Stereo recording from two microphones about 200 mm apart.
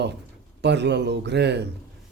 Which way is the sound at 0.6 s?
60° right (ahead or behind).